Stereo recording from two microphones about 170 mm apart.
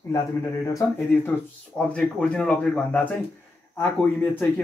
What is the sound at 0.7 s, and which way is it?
Speech, 15° left (ahead or behind).